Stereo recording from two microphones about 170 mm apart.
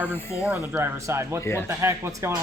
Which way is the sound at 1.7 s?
15° right (ahead or behind).